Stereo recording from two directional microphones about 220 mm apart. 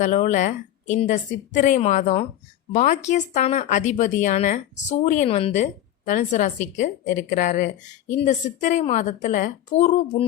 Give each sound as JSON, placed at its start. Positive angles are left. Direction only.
{"t": 0.0, "sound": "speech", "side_deg": 35}